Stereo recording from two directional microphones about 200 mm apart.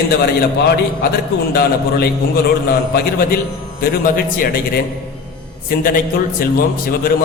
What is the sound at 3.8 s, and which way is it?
Speech, 45° left (ahead or behind).